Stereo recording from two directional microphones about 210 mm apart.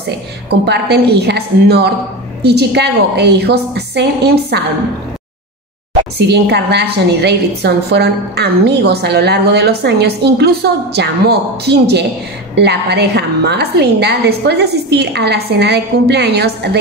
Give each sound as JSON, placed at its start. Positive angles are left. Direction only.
{"t": 0.0, "sound": "a woman's voice", "side_deg": -50}
{"t": 6.1, "sound": "a woman's voice", "side_deg": -50}